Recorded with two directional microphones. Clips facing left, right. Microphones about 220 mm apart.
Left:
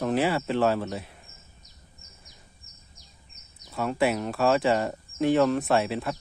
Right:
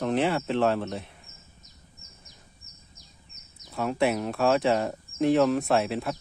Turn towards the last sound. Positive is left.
turn(degrees=0)  # may be behind; listen again after turning